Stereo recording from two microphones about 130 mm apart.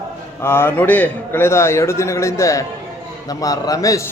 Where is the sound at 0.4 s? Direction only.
20° left (ahead or behind).